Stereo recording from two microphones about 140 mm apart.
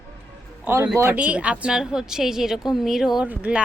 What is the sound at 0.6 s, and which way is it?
A man's voice, 15° right (ahead or behind).